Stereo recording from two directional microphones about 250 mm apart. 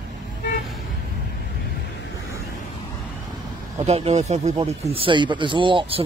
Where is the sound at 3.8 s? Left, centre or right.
Right.